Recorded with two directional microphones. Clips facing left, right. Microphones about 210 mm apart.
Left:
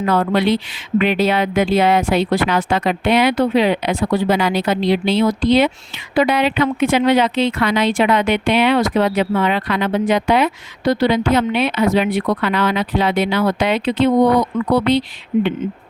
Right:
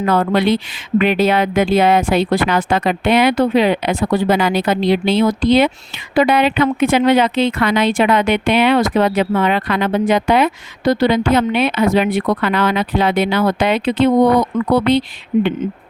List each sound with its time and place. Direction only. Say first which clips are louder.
0.0 s a woman's voice: right 1 dB; 50° right (ahead or behind)